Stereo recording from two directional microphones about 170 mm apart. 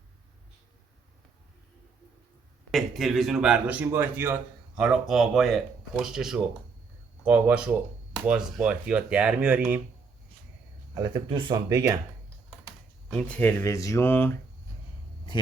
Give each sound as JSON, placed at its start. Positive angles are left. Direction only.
{"t": 2.7, "sound": "speech", "side_deg": 0}
{"t": 10.9, "sound": "speech", "side_deg": -25}
{"t": 13.1, "sound": "speech", "side_deg": 5}